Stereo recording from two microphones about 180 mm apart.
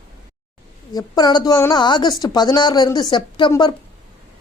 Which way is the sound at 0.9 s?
20° left (ahead or behind).